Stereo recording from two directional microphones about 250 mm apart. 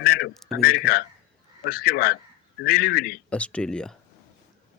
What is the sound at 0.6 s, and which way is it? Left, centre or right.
A man's voice, left.